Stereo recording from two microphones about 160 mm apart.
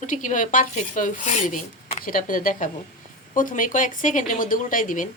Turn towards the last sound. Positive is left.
turn(degrees=55)  # may be behind; listen again after turning